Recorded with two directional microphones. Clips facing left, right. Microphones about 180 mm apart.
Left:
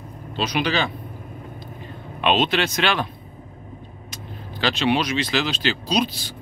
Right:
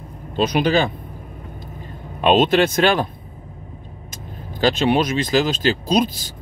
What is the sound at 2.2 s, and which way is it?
Speech, 45° right (ahead or behind).